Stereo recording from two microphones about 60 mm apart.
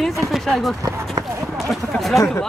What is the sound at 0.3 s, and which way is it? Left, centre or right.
Speech, centre.